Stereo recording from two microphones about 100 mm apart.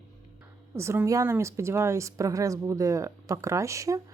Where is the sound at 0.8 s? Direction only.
25° right (ahead or behind).